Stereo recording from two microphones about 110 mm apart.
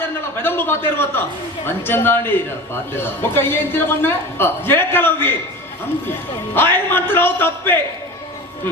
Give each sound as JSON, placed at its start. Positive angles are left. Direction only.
{"t": 0.4, "sound": "a man's voice", "side_deg": 20}